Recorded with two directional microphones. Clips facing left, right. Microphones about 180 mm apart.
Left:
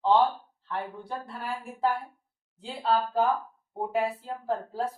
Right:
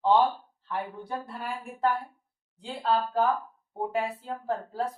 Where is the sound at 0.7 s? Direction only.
5° right (ahead or behind).